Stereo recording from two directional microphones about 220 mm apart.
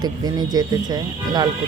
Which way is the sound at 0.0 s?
20° right (ahead or behind).